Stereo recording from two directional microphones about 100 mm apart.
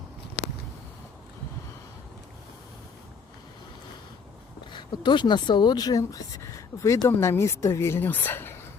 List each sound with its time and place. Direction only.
4.7 s speech: 50° left (ahead or behind); by 8.6 s 25° left (ahead or behind)